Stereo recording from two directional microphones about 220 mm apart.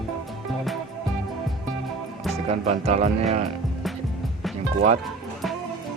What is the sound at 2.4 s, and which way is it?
Speech, 30° right (ahead or behind).